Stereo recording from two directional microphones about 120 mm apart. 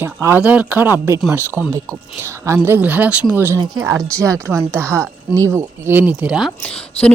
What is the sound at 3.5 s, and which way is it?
Speech, 35° right (ahead or behind).